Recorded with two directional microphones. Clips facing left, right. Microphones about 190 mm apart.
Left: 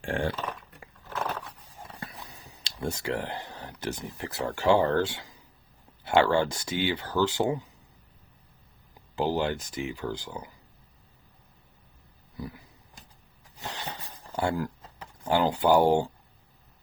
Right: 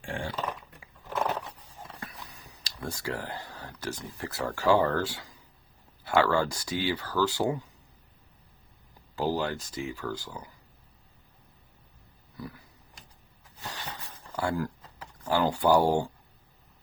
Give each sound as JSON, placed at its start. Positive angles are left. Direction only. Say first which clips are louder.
{"t": 1.0, "sound": "biting", "louder": "right 3 dB", "side_deg": -15}
{"t": 2.6, "sound": "speech", "louder": "left 4 dB", "side_deg": 25}
{"t": 9.1, "sound": "speech", "louder": "left 2 dB", "side_deg": 20}
{"t": 12.4, "sound": "a sound", "louder": "left 2 dB", "side_deg": 20}